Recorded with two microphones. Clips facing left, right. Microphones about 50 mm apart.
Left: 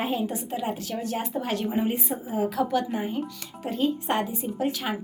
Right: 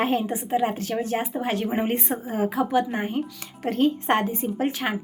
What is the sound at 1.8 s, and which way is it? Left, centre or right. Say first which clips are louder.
Speech: right 2 dB; right.